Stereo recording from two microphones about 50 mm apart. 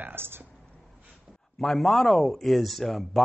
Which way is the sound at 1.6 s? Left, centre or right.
Centre.